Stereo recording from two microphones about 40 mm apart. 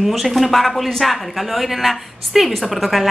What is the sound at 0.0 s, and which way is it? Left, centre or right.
A woman's voice, centre.